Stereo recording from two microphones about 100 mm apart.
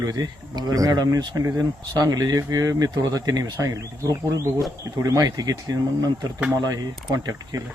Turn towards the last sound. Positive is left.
turn(degrees=-35)  # may be behind; listen again after turning